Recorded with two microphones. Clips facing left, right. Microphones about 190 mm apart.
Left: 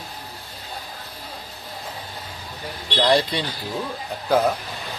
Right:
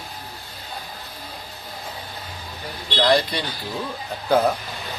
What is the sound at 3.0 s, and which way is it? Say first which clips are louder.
Speech: even; 25° left (ahead or behind).